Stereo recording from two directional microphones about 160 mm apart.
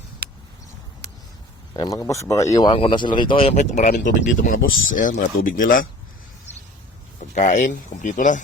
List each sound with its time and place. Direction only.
0.2 s a sound: 90° right
1.7 s speech: 25° left (ahead or behind)
2.6 s speech: 30° left (ahead or behind)
3.5 s speech: 50° left (ahead or behind)
4.0 s speech: 60° left (ahead or behind)
7.2 s speech: 50° left (ahead or behind)